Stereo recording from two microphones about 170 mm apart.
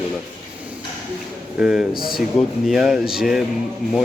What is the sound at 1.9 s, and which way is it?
Speech, 60° left (ahead or behind).